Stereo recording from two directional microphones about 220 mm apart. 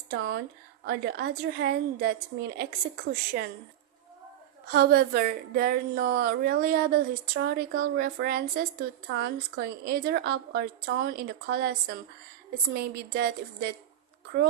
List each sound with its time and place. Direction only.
0.1 s a woman's voice: 45° right (ahead or behind)
4.7 s a woman's voice: 45° right (ahead or behind)